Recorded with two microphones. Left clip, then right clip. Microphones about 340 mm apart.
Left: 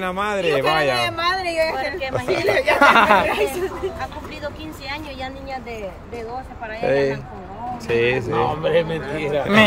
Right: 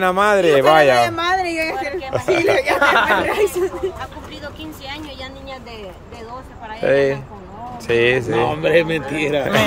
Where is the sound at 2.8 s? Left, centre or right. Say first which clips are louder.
Left 4 dB; left.